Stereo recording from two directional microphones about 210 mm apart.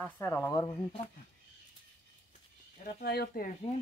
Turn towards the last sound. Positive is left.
turn(degrees=45)  # may be behind; listen again after turning